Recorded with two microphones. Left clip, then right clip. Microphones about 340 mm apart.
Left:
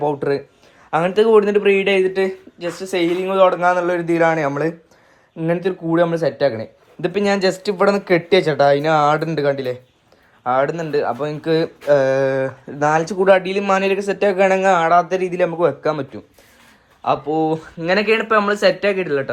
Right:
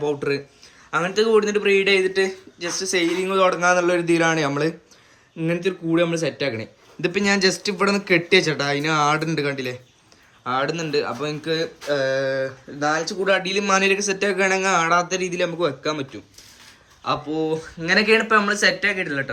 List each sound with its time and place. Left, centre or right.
0.0 s speech: centre